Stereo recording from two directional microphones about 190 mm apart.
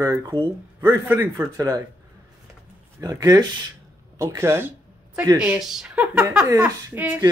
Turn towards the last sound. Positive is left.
turn(degrees=-10)  # may be behind; listen again after turning